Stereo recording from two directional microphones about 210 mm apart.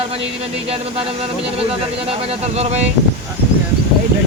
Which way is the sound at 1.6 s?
30° right (ahead or behind).